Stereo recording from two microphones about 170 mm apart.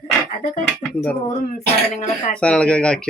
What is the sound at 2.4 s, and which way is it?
Speech, 5° left (ahead or behind).